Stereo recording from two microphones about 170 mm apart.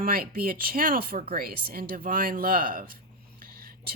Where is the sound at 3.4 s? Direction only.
60° right (ahead or behind).